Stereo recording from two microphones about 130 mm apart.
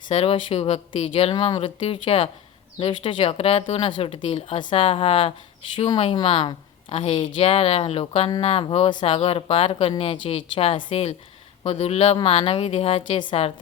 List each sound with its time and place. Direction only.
0.1 s a woman's voice: 45° left (ahead or behind)